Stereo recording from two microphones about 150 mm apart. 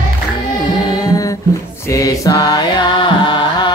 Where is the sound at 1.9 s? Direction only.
25° left (ahead or behind).